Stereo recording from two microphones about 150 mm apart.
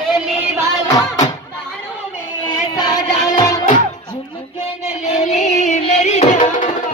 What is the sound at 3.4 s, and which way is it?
Music, 20° left (ahead or behind).